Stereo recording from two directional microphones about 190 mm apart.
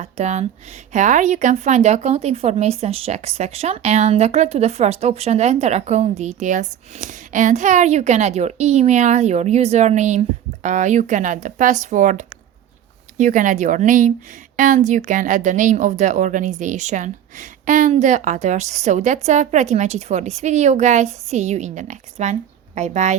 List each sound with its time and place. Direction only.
0.0 s a woman's voice: 35° right (ahead or behind)